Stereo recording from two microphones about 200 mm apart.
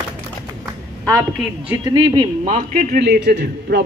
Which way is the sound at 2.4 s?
35° right (ahead or behind).